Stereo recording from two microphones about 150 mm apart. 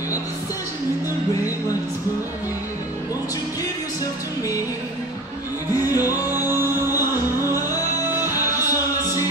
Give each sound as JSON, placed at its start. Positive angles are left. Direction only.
{"t": 5.9, "sound": "music", "side_deg": 25}
{"t": 6.3, "sound": "music", "side_deg": -15}
{"t": 8.2, "sound": "music", "side_deg": 20}